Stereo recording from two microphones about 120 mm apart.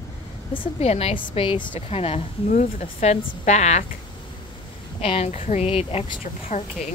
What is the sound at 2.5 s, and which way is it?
Speech, 70° left (ahead or behind).